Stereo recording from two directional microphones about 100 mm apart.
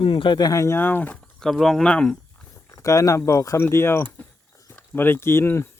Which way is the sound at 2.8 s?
35° left (ahead or behind).